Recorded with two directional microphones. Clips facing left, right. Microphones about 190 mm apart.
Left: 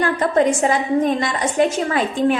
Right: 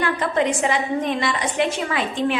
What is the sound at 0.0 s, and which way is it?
A woman's voice, 40° left (ahead or behind).